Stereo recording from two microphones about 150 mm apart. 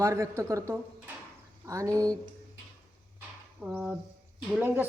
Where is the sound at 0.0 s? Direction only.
20° right (ahead or behind).